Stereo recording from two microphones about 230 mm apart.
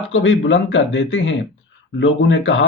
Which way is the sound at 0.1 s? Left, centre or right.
Left.